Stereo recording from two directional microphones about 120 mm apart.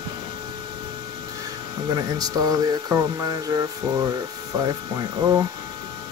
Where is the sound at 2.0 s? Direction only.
30° right (ahead or behind).